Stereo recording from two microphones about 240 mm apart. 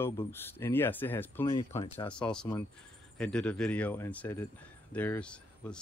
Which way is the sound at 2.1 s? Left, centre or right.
Centre.